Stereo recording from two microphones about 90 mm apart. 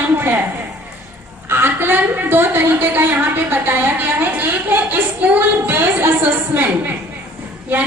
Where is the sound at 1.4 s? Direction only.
25° right (ahead or behind).